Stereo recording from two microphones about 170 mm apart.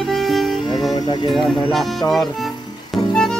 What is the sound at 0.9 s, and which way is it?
Music, 25° left (ahead or behind).